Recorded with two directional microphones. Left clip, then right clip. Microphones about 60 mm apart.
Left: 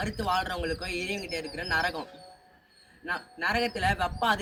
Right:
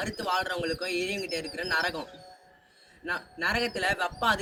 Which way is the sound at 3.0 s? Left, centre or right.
Left.